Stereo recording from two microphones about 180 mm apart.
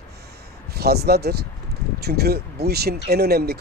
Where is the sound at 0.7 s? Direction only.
60° right (ahead or behind).